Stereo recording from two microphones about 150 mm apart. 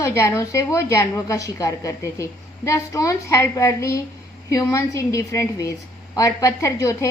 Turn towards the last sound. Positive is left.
turn(degrees=20)  # may be behind; listen again after turning